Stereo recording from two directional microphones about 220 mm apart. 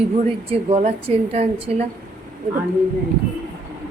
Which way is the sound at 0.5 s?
25° right (ahead or behind).